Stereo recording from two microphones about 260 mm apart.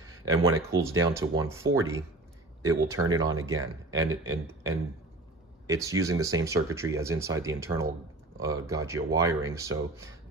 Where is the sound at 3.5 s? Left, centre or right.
Right.